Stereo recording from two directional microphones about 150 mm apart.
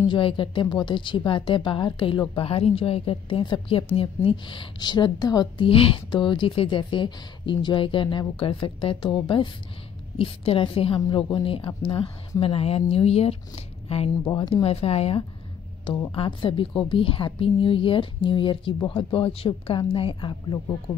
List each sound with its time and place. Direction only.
0.0 s speech: 35° left (ahead or behind)
14.2 s speech: 25° left (ahead or behind)
14.5 s speech: 40° left (ahead or behind)